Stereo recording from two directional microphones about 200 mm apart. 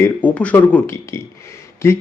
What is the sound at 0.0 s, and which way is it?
Speech, 10° left (ahead or behind).